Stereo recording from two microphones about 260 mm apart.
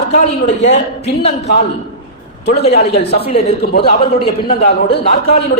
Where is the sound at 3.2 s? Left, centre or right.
Left.